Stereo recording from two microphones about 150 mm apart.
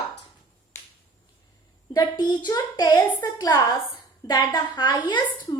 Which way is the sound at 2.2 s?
30° left (ahead or behind).